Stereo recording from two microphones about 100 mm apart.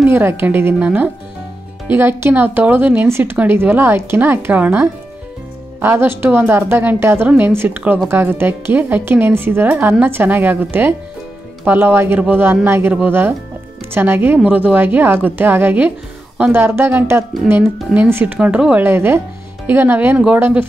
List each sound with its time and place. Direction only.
0.1 s speech: 20° right (ahead or behind)